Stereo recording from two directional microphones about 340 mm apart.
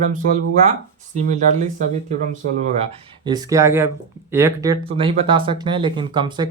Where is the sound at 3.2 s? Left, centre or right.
Centre.